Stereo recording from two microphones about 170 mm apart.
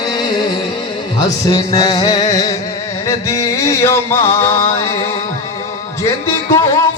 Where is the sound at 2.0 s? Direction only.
25° left (ahead or behind).